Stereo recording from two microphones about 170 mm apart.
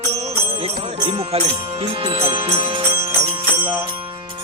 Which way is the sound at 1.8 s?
35° right (ahead or behind).